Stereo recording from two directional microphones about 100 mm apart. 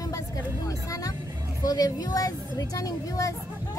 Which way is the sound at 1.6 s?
40° left (ahead or behind).